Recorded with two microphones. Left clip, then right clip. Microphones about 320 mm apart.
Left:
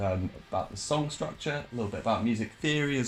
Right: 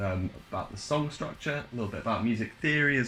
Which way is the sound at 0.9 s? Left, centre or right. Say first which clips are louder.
Even; centre.